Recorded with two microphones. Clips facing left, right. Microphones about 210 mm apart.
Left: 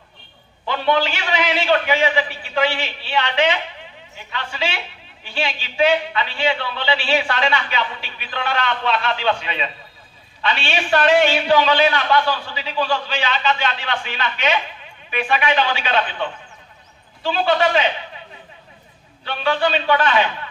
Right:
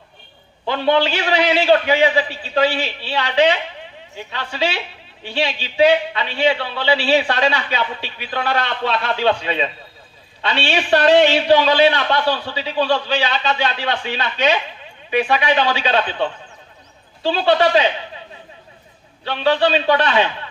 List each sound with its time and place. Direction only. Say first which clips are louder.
0.8 s a man's voice: right 3 dB; 35° right (ahead or behind)
19.2 s a man's voice: right 3 dB; 35° right (ahead or behind)